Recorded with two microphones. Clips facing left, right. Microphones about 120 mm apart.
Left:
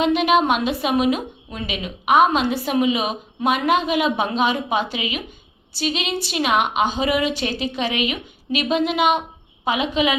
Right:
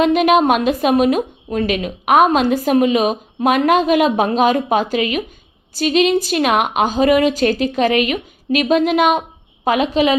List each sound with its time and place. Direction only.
0.0 s a woman's voice: 50° right (ahead or behind)